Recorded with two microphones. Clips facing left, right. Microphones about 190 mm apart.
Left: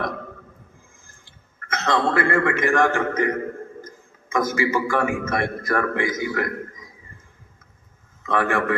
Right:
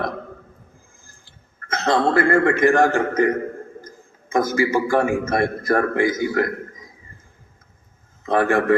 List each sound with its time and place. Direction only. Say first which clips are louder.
1.7 s a man's voice: right 3 dB; 30° right (ahead or behind)
4.3 s a man's voice: right 3 dB; 30° right (ahead or behind)
8.2 s a man's voice: right 4 dB; 35° right (ahead or behind)